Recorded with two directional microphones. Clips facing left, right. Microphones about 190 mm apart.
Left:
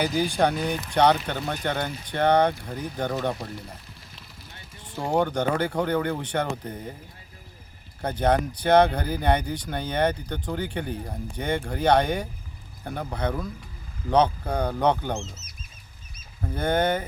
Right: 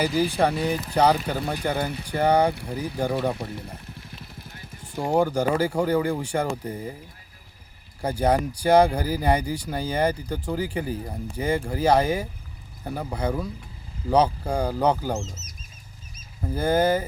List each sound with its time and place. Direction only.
0.0 s speech: centre (ahead or behind)
4.0 s vehicle: 55° right (ahead or behind)
4.9 s speech: 10° right (ahead or behind)
8.0 s speech: 10° right (ahead or behind)
15.2 s speech: 45° right (ahead or behind)
16.4 s speech: 5° right (ahead or behind)